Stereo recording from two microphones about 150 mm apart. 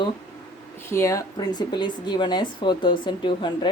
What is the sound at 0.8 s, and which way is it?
Speech, 20° left (ahead or behind).